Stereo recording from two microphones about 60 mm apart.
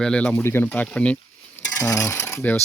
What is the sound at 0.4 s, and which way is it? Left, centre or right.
Speech, left.